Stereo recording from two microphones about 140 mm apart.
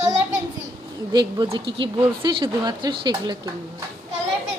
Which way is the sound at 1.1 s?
30° right (ahead or behind).